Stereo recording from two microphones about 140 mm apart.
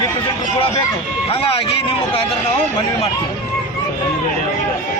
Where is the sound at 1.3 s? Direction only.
45° left (ahead or behind).